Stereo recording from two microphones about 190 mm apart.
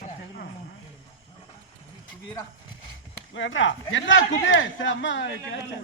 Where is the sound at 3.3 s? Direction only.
80° left.